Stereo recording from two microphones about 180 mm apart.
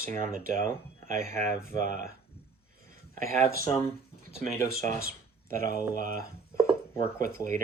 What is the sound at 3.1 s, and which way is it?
Speech, 50° right (ahead or behind).